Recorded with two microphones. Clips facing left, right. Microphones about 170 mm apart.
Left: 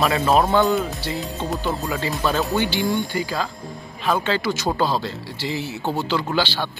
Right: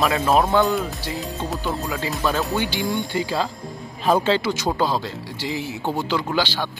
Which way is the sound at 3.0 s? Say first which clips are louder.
Right 1 dB; 25° right (ahead or behind).